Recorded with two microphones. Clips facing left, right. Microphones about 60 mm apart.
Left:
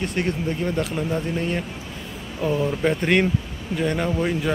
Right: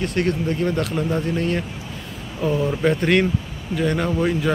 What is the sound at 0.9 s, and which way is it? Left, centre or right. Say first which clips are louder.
Speech: right 2 dB; centre.